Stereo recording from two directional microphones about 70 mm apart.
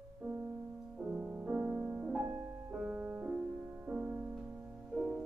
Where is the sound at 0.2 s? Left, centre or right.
Right.